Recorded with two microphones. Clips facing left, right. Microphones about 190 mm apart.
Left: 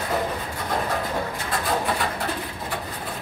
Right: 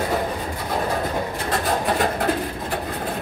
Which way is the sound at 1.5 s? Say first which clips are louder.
Right 3 dB; 45° right (ahead or behind).